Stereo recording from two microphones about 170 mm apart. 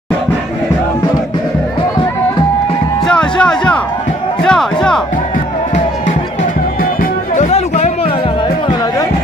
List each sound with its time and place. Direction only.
3.1 s music: 5° left (ahead or behind)
7.3 s music: 45° left (ahead or behind)